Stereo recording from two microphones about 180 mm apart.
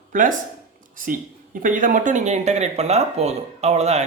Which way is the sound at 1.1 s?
50° right (ahead or behind).